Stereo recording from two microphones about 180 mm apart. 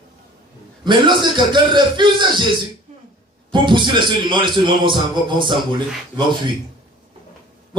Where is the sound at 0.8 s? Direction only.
25° right (ahead or behind).